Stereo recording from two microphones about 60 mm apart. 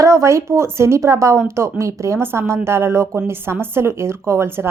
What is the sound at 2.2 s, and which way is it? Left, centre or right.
Speech, right.